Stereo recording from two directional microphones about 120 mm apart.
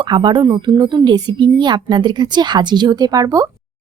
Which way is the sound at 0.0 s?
40° right (ahead or behind).